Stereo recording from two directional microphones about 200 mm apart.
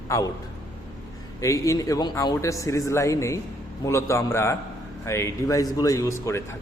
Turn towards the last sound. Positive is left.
turn(degrees=15)  # may be behind; listen again after turning